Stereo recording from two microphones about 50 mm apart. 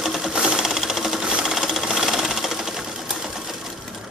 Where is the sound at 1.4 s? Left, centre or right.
Centre.